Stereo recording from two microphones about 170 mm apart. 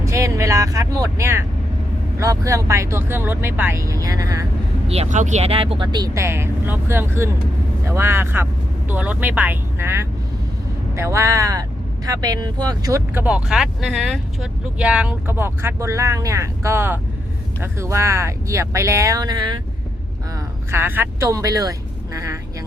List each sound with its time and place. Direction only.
0.0 s speech: 15° right (ahead or behind)
4.9 s speech: 40° right (ahead or behind); by 19.5 s 25° right (ahead or behind)
20.7 s speech: 15° right (ahead or behind)